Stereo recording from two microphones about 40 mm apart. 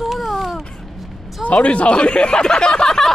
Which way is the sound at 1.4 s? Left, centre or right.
Left.